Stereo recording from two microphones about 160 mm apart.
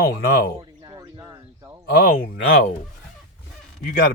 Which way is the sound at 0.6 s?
25° right (ahead or behind).